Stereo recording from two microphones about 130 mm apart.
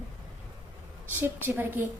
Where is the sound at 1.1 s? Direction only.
15° right (ahead or behind).